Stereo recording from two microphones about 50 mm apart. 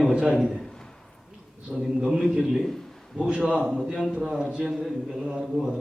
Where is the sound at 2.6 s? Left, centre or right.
Centre.